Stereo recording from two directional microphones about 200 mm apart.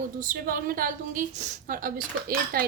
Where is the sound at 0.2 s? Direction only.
45° right (ahead or behind).